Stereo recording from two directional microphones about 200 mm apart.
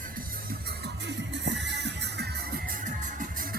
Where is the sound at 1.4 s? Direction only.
60° right (ahead or behind).